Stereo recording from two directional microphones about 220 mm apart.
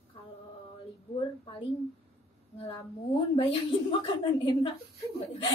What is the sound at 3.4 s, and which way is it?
A woman's voice, 25° left (ahead or behind).